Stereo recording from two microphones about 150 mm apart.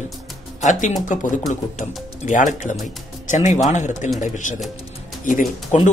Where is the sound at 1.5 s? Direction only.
55° left (ahead or behind).